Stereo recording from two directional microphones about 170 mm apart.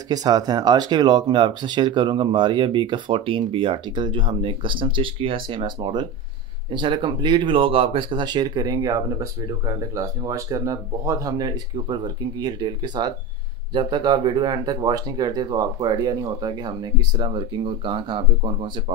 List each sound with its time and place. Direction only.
0.1 s speech: 20° right (ahead or behind)